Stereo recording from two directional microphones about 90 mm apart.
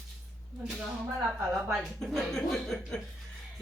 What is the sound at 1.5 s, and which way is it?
A woman's voice, 5° right (ahead or behind).